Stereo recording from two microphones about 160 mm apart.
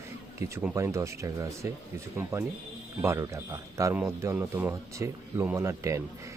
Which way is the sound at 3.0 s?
15° right (ahead or behind).